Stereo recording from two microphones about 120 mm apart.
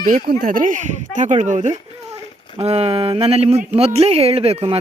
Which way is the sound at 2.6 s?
60° right (ahead or behind).